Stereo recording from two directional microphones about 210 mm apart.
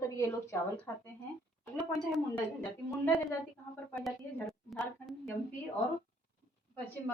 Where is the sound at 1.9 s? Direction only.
5° left (ahead or behind).